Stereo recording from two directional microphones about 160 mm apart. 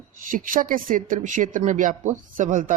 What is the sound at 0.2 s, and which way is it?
Speech, 55° right (ahead or behind).